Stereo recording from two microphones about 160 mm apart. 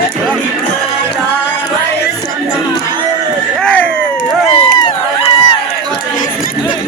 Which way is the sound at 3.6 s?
5° left (ahead or behind).